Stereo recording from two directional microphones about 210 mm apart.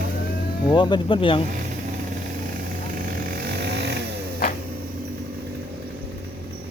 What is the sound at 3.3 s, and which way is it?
Vehicle, 50° right (ahead or behind).